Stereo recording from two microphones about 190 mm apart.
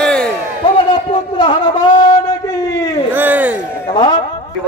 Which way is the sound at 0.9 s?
25° left (ahead or behind).